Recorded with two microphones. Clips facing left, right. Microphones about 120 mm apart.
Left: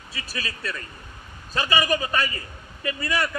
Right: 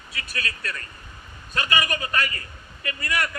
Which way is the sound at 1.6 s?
25° left (ahead or behind).